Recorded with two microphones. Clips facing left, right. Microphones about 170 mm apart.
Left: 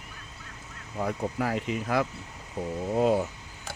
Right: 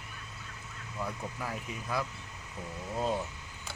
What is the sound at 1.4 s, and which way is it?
Speech, 90° left.